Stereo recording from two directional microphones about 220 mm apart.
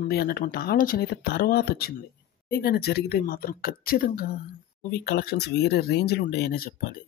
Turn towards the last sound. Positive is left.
turn(degrees=40)  # may be behind; listen again after turning